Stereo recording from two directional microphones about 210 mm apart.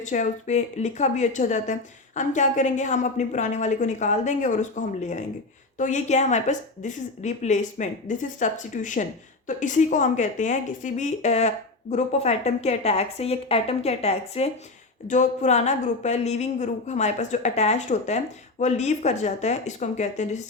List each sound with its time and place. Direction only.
0.0 s speech: 35° left (ahead or behind)